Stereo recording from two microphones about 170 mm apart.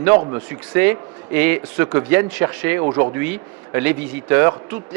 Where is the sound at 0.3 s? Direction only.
10° right (ahead or behind).